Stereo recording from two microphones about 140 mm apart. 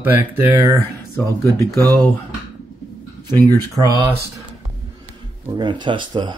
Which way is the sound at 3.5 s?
25° right (ahead or behind).